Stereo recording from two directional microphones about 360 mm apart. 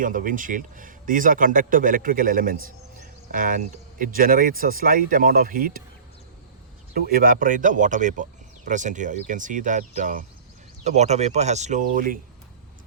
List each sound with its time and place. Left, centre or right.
0.0 s speech: right
6.9 s speech: right